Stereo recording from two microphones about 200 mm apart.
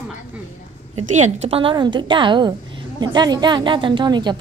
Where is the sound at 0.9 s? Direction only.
35° right (ahead or behind).